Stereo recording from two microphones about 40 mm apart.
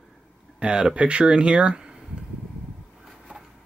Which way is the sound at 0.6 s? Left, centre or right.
Right.